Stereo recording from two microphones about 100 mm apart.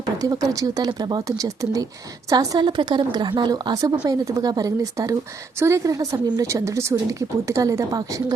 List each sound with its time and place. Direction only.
0.2 s a woman's voice: 35° right (ahead or behind)